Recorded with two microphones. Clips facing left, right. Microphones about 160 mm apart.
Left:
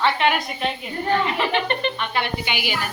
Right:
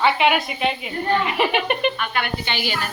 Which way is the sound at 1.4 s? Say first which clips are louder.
Right 2 dB; 15° right (ahead or behind).